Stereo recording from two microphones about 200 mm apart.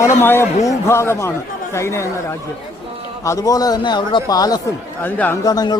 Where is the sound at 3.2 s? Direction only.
15° left (ahead or behind).